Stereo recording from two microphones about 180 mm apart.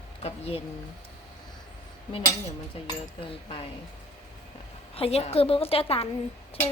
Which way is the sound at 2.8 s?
30° left (ahead or behind).